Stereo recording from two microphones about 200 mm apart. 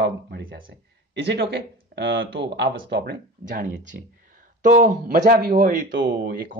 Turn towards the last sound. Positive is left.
turn(degrees=-50)  # may be behind; listen again after turning